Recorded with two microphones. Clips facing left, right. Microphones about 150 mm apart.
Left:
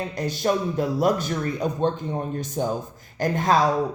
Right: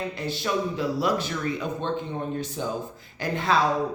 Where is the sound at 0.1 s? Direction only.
45° left (ahead or behind).